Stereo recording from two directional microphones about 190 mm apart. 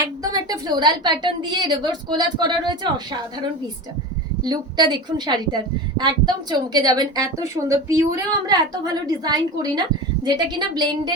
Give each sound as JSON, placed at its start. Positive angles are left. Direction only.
{"t": 0.2, "sound": "a woman's voice", "side_deg": -20}
{"t": 4.4, "sound": "a woman's voice", "side_deg": -20}